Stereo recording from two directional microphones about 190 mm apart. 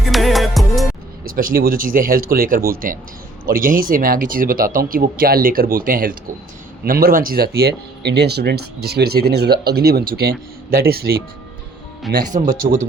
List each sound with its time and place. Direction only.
0.0 s music: centre (ahead or behind)
1.2 s speech: 50° right (ahead or behind)
12.1 s speech: centre (ahead or behind)